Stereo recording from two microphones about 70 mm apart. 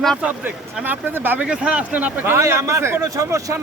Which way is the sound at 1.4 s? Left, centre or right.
Centre.